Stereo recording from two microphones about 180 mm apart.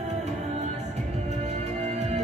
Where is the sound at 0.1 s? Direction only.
40° right (ahead or behind).